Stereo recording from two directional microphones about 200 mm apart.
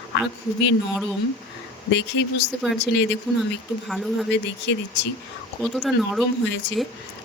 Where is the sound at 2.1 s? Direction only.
70° left (ahead or behind).